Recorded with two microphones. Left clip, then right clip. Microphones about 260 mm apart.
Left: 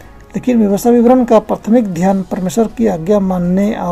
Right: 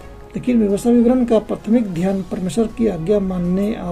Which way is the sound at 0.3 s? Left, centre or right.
Centre.